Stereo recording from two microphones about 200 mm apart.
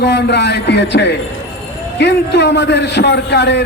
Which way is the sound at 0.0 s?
60° left (ahead or behind).